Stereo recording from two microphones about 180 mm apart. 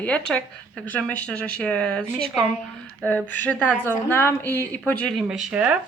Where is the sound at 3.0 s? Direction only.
10° left (ahead or behind).